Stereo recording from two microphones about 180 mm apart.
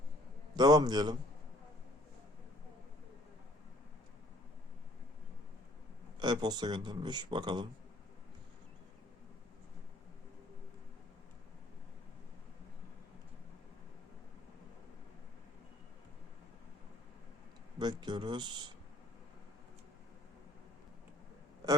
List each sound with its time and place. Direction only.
0.5 s speech: 20° right (ahead or behind)
6.1 s speech: 25° right (ahead or behind)
17.7 s speech: 25° right (ahead or behind)